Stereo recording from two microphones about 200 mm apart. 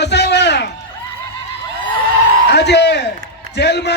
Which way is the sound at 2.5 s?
60° left (ahead or behind).